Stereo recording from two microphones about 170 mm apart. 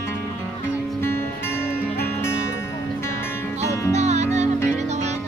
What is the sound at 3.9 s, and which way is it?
Music, 40° right (ahead or behind).